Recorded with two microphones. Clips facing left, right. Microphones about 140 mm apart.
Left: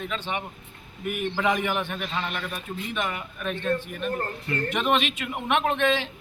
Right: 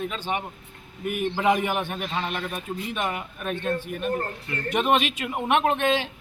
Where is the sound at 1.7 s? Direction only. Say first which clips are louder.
Right 1 dB; 45° right (ahead or behind).